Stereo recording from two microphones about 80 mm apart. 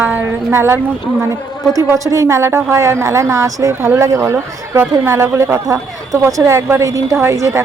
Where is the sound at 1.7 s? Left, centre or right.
Right.